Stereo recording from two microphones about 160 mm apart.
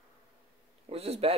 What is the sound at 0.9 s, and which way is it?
Speech, 40° right (ahead or behind).